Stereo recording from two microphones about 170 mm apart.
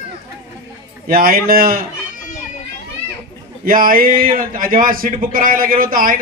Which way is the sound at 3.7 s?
55° right (ahead or behind).